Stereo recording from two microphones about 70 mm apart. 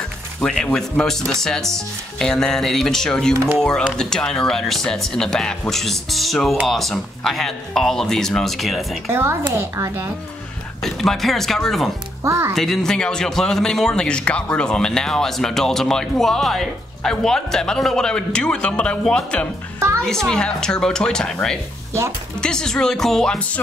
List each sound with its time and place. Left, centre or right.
0.4 s a man's voice: centre
9.1 s speech: right
10.8 s speech: centre
12.2 s speech: right
12.5 s a man's voice: centre